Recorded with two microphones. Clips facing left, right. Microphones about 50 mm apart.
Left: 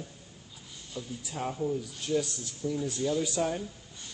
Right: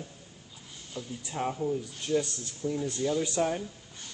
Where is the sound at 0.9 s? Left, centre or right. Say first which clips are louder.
Even; right.